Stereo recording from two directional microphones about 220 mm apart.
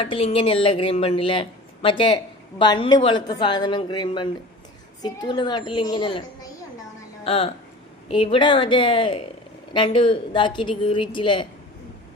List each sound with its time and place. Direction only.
0.0 s a woman's voice: 25° left (ahead or behind)